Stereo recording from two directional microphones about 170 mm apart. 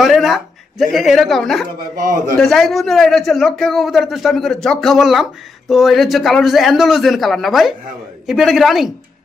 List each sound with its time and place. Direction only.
0.0 s a man's voice: centre (ahead or behind)